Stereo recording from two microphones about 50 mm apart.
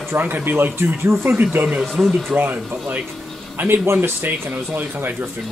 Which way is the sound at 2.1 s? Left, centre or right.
Right.